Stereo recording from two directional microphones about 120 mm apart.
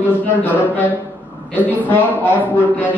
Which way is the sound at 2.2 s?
15° left (ahead or behind).